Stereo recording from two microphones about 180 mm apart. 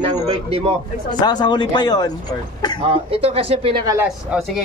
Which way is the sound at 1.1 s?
25° left (ahead or behind).